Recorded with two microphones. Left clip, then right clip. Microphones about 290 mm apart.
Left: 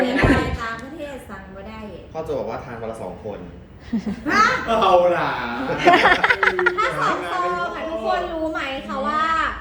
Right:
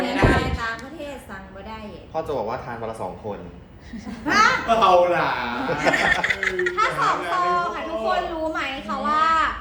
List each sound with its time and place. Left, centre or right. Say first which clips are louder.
0.0 s a sound: left 2 dB; centre
2.1 s speech: right 1 dB; right
3.9 s speech: left 1 dB; centre